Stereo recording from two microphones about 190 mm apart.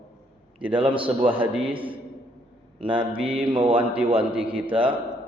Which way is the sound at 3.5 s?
25° right (ahead or behind).